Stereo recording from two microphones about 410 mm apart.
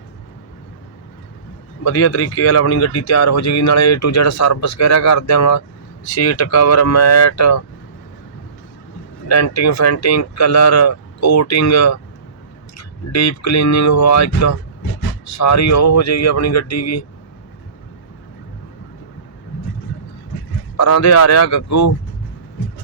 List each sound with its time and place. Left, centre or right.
1.8 s speech: left
9.2 s speech: left
20.7 s speech: left